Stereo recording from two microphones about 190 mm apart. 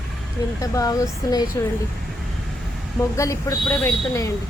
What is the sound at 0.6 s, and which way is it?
Speech, 20° left (ahead or behind).